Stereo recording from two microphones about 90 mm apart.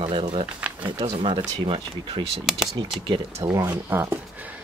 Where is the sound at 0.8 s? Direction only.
60° right (ahead or behind).